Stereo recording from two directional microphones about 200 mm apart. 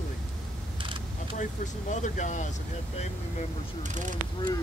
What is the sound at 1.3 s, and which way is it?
Speech, 35° left (ahead or behind).